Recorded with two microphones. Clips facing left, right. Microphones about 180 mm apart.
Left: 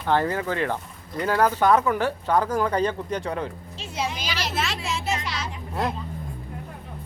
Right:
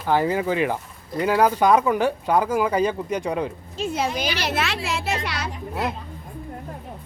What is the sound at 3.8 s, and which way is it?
Speech, 55° right (ahead or behind).